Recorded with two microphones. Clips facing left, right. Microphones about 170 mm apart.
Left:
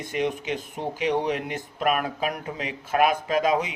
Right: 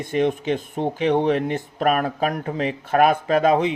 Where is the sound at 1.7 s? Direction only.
40° right (ahead or behind).